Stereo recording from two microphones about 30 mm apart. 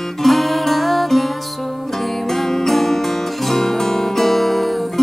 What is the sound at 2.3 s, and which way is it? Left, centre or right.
Music, centre.